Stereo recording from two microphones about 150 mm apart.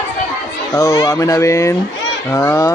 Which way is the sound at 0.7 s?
20° left (ahead or behind).